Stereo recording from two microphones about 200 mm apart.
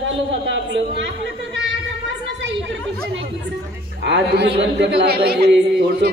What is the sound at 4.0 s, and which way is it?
A man's voice, 60° right (ahead or behind).